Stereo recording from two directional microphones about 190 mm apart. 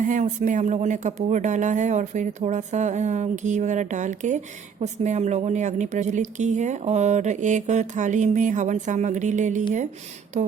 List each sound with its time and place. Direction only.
0.0 s speech: 40° right (ahead or behind)